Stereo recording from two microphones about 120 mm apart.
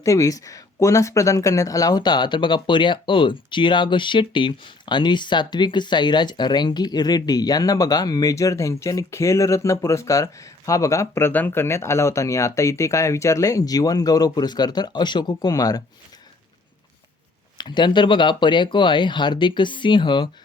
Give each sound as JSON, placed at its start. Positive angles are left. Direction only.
{"t": 0.0, "sound": "speech", "side_deg": 25}
{"t": 17.6, "sound": "speech", "side_deg": 40}